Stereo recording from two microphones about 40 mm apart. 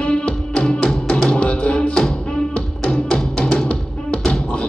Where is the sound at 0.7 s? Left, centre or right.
Centre.